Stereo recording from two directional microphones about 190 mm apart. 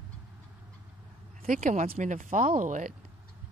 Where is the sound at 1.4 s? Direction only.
45° right (ahead or behind).